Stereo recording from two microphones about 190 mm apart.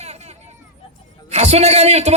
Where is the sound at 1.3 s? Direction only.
35° right (ahead or behind).